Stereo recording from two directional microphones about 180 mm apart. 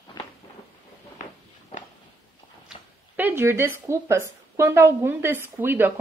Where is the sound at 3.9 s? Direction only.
15° right (ahead or behind).